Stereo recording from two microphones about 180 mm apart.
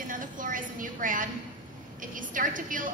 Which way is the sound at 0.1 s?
50° right (ahead or behind).